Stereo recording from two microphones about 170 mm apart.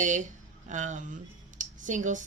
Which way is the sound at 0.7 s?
45° right (ahead or behind).